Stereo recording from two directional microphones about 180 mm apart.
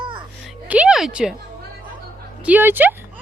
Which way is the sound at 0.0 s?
30° right (ahead or behind).